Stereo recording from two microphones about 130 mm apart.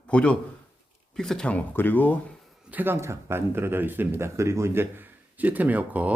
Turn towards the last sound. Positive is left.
turn(degrees=-10)  # may be behind; listen again after turning